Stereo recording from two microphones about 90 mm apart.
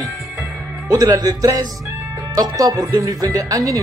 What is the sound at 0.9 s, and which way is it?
Speech, 40° right (ahead or behind).